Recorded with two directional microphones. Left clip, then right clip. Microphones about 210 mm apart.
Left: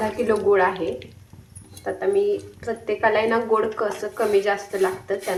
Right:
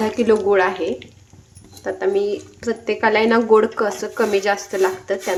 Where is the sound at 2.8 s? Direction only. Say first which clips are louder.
Right 3 dB; 55° right (ahead or behind).